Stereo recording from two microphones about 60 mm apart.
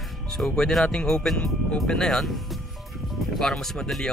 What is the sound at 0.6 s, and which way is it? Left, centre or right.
Speech, centre.